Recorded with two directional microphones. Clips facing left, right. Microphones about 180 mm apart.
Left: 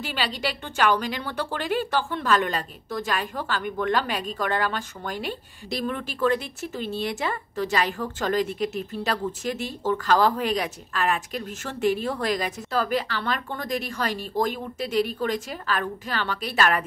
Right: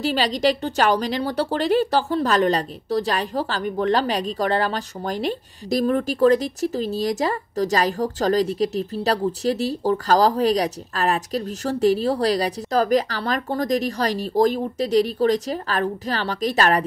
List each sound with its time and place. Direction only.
0.0 s a woman's voice: 40° right (ahead or behind)